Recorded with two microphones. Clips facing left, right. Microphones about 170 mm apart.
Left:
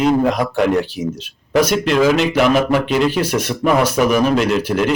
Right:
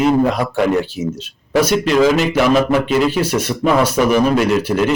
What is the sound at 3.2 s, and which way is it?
Speech, 55° left (ahead or behind).